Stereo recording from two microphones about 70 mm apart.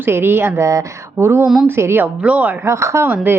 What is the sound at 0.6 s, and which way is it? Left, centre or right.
Speech, right.